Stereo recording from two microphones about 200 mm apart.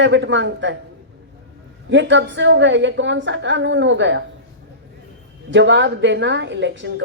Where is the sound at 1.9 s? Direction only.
65° right (ahead or behind).